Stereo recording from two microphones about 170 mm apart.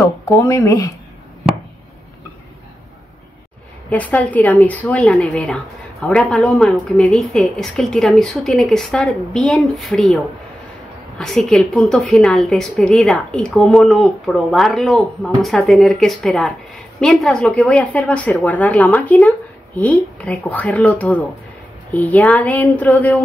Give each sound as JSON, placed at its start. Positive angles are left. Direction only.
{"t": 0.4, "sound": "speech", "side_deg": 20}
{"t": 3.9, "sound": "a woman's voice", "side_deg": 10}